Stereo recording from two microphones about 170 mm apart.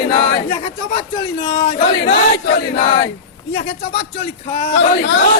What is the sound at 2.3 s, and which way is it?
Chant, 70° left (ahead or behind).